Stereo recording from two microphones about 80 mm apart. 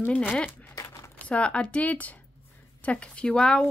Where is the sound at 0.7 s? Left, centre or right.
Left.